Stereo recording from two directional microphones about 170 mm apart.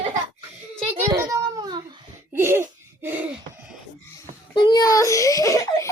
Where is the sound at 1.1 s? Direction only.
20° right (ahead or behind).